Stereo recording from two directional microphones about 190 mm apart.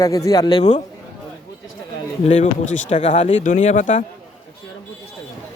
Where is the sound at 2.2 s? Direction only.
40° left (ahead or behind).